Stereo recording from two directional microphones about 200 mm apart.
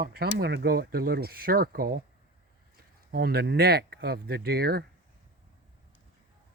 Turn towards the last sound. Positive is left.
turn(degrees=-50)  # may be behind; listen again after turning